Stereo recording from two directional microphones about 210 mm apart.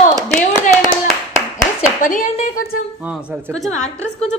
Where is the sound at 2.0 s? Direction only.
40° left (ahead or behind).